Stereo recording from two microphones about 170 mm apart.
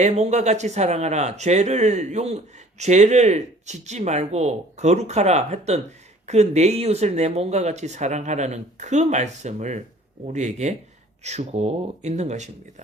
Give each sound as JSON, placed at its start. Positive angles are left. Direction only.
{"t": 0.0, "sound": "speech", "side_deg": -45}